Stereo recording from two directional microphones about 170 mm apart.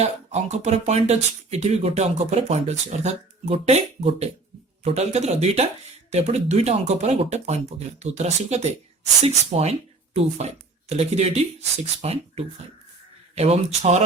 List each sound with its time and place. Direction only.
0.0 s speech: 40° right (ahead or behind)